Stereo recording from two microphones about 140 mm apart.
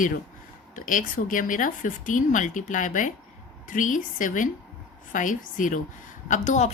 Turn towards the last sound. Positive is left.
turn(degrees=60)  # may be behind; listen again after turning